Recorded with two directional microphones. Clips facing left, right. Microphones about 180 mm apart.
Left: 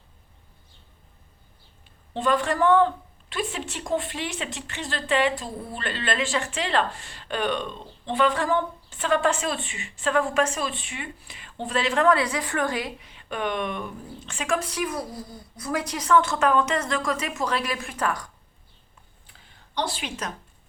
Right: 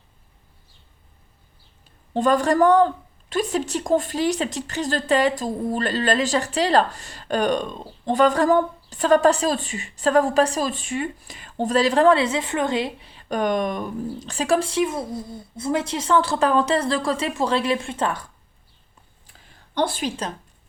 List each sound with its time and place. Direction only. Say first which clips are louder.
2.1 s a woman's voice: right 5 dB; 45° right (ahead or behind); by 18.3 s 25° right (ahead or behind)
19.3 s a sound: right 5 dB; 50° right (ahead or behind)
20.1 s a woman's voice: right 5 dB; 30° right (ahead or behind)